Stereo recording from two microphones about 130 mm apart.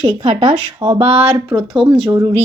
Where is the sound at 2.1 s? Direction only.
25° right (ahead or behind).